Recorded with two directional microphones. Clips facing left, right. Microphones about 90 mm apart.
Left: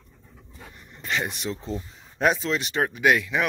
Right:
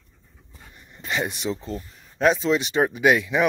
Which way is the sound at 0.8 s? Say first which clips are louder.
Right 1 dB; 5° right (ahead or behind).